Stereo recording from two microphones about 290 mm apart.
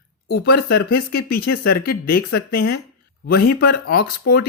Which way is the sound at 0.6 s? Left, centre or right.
Left.